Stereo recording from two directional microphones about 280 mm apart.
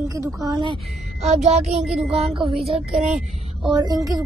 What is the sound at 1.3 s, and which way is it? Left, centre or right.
Speech, right.